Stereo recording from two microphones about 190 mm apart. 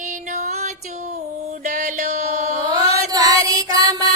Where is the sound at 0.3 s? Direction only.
40° right (ahead or behind).